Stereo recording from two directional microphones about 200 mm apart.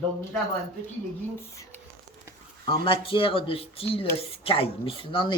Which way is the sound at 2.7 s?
25° left (ahead or behind).